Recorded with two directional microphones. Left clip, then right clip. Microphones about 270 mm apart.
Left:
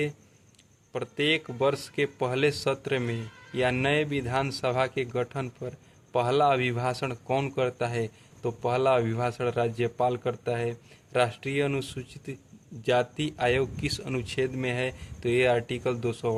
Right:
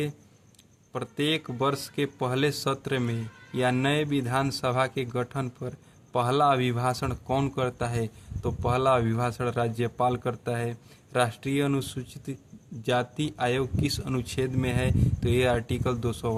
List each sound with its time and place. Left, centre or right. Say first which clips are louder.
0.9 s speech: left 2 dB; right